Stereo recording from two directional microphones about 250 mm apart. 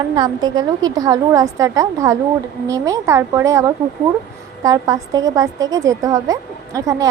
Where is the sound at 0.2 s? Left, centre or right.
Centre.